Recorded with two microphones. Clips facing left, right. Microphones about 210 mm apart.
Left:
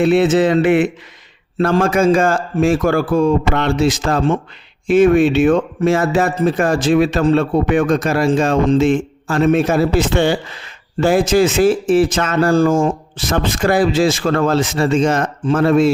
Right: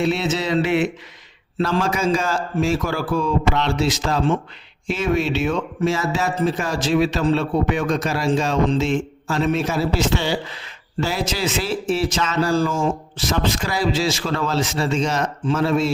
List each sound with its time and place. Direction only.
0.0 s a man's voice: 55° left (ahead or behind)